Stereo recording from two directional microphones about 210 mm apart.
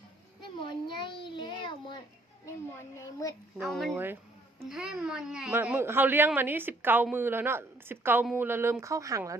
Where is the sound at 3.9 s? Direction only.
10° right (ahead or behind).